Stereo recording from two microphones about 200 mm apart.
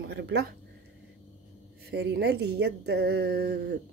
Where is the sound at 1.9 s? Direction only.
55° right (ahead or behind).